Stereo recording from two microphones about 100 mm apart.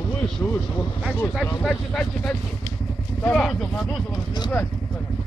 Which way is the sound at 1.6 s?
5° left (ahead or behind).